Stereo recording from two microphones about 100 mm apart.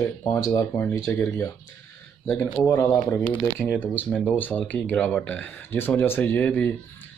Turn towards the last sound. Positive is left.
turn(degrees=15)  # may be behind; listen again after turning